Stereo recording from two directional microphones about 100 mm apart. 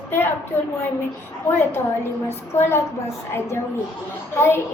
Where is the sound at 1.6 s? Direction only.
25° left (ahead or behind).